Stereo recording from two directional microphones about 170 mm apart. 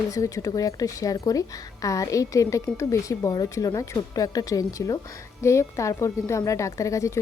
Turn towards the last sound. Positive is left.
turn(degrees=20)  # may be behind; listen again after turning